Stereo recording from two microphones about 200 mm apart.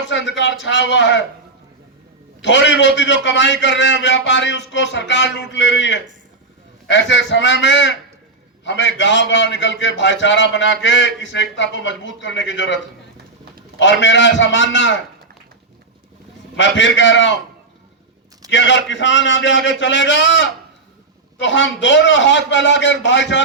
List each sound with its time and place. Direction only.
0.1 s a man's voice: 65° left (ahead or behind)
2.4 s a man's voice: 65° left (ahead or behind)
16.6 s a man's voice: 65° left (ahead or behind)
18.5 s a man's voice: 65° left (ahead or behind)